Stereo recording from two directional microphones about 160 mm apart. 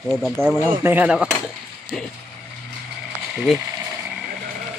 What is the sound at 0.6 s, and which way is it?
Speech, 15° right (ahead or behind).